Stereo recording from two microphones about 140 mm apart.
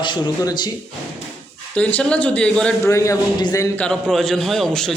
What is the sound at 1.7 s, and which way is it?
A man's voice, 10° left (ahead or behind).